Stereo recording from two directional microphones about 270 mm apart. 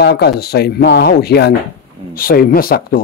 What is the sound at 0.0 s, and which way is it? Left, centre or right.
A man's voice, left.